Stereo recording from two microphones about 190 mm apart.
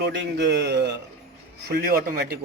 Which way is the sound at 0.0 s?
65° right (ahead or behind).